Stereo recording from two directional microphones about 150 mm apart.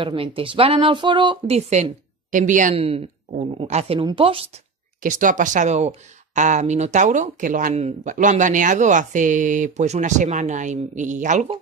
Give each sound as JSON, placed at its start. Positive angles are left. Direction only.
{"t": 0.0, "sound": "a woman's voice", "side_deg": -35}
{"t": 2.3, "sound": "speech", "side_deg": -60}
{"t": 2.7, "sound": "a woman's voice", "side_deg": -40}
{"t": 5.0, "sound": "speech", "side_deg": -60}